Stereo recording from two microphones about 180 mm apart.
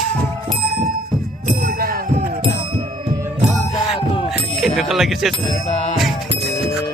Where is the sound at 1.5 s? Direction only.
50° right (ahead or behind).